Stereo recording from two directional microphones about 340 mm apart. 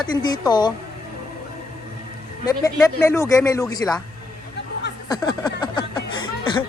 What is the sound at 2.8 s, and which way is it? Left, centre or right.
Speech, centre.